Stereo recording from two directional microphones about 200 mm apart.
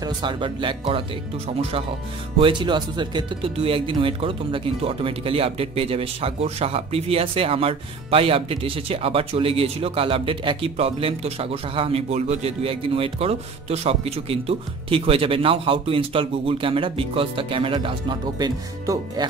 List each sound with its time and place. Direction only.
0.0 s speech: 25° right (ahead or behind)
2.3 s speech: 25° right (ahead or behind)